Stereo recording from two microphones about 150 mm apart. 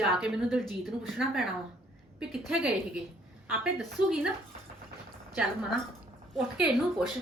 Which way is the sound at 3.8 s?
5° right (ahead or behind).